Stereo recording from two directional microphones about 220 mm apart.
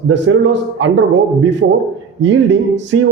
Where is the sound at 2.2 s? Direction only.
55° right (ahead or behind).